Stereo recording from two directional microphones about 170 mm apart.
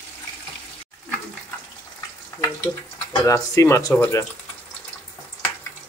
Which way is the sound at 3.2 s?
20° left (ahead or behind).